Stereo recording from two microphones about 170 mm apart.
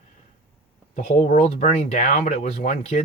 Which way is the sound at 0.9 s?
45° left (ahead or behind).